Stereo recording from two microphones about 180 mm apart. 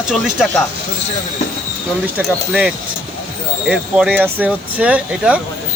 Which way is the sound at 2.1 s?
10° right (ahead or behind).